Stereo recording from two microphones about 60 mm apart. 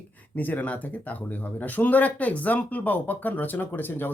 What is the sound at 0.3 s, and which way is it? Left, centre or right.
Speech, left.